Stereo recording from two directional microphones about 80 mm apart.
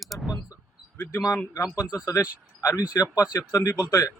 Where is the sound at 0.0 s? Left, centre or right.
Centre.